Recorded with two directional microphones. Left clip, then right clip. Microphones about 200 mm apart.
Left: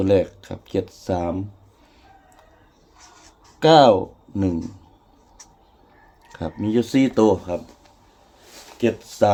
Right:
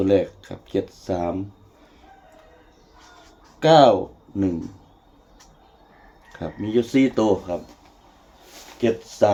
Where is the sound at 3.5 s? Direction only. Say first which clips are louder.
Left 1 dB; 55° left (ahead or behind).